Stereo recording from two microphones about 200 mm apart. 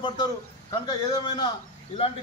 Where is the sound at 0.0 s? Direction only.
20° left (ahead or behind).